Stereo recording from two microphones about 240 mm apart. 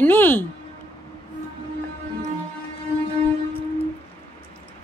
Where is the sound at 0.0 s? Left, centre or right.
Centre.